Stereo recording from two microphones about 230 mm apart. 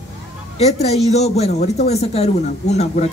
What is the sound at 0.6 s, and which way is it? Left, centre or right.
A woman's voice, left.